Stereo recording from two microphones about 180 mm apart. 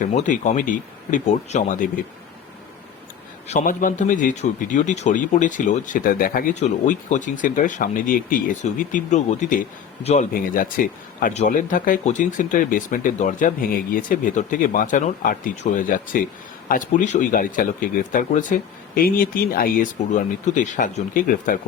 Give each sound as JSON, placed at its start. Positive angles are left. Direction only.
{"t": 0.1, "sound": "a man's voice", "side_deg": 40}
{"t": 3.4, "sound": "a man's voice", "side_deg": 40}
{"t": 10.3, "sound": "a man's voice", "side_deg": 50}